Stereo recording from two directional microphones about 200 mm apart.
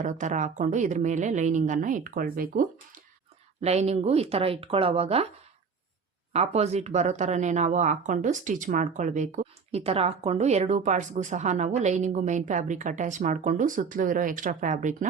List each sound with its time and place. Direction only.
0.0 s speech: 40° right (ahead or behind)
3.6 s speech: 30° right (ahead or behind)
6.3 s speech: 30° right (ahead or behind)